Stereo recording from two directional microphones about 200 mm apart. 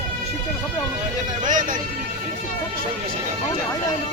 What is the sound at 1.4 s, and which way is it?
Speech, 40° right (ahead or behind).